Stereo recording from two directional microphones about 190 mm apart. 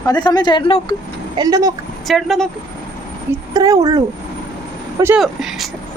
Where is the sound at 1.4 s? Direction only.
20° right (ahead or behind).